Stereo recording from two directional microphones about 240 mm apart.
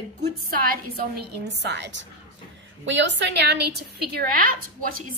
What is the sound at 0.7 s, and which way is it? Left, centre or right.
A woman's voice, right.